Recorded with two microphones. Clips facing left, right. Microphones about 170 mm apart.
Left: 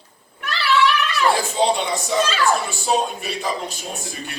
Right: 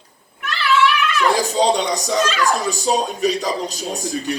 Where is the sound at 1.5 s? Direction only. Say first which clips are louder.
Right 2 dB; 40° right (ahead or behind).